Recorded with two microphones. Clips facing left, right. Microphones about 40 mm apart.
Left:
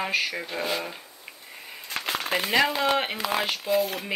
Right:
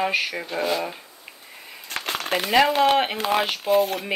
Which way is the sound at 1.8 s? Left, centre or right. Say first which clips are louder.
Right 1 dB; right.